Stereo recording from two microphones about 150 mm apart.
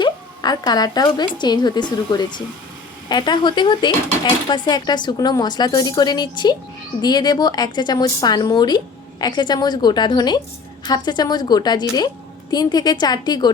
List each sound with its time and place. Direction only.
0.0 s a woman's voice: 25° left (ahead or behind)